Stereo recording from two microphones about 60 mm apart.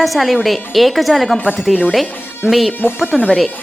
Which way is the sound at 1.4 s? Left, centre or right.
Centre.